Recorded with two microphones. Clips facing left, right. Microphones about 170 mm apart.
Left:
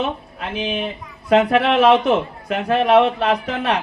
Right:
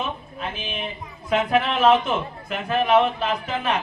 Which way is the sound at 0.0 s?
70° left (ahead or behind).